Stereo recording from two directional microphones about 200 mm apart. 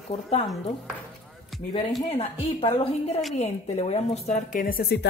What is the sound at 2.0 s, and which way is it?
A woman's voice, 30° left (ahead or behind).